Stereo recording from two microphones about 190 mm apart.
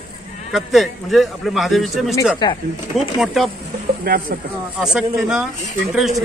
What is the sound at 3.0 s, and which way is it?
Speech, centre (ahead or behind).